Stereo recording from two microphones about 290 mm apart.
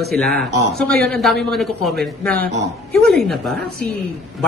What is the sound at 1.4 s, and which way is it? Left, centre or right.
Speech, centre.